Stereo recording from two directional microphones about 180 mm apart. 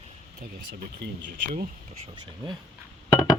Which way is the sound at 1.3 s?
50° right (ahead or behind).